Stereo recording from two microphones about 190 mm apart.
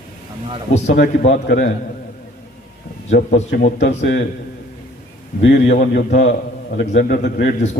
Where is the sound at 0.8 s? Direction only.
40° left (ahead or behind).